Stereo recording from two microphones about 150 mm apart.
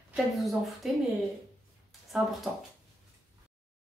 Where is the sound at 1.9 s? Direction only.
Centre (ahead or behind).